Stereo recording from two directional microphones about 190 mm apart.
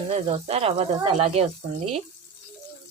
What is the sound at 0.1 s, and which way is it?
Speech, 30° right (ahead or behind).